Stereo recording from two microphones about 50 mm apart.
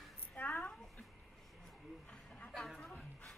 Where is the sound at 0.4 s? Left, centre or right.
Left.